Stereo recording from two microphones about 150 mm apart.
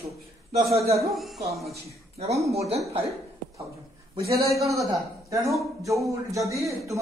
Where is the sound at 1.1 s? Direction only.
Centre (ahead or behind).